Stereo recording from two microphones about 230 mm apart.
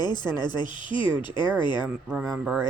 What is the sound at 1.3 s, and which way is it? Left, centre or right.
Speech, centre.